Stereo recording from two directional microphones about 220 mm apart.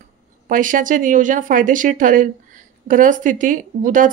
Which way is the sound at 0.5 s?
35° right (ahead or behind).